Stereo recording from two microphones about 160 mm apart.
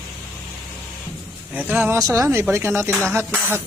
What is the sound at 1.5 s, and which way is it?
Speech, 10° right (ahead or behind).